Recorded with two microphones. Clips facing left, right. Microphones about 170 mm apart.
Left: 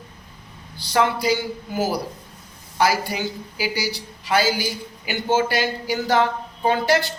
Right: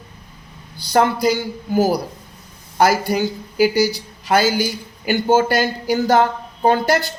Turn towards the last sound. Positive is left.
turn(degrees=-45)  # may be behind; listen again after turning